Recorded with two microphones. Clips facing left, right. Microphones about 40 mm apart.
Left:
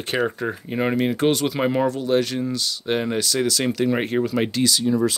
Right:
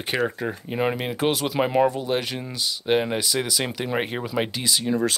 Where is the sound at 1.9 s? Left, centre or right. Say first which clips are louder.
Left 5 dB; centre.